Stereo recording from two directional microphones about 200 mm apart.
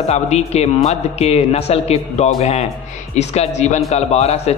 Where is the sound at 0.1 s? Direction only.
30° left (ahead or behind).